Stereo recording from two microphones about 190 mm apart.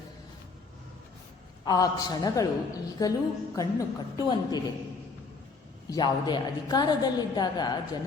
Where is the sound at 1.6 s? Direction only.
20° left (ahead or behind).